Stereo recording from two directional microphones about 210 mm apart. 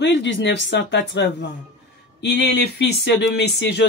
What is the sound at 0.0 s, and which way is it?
Speech, 55° left (ahead or behind).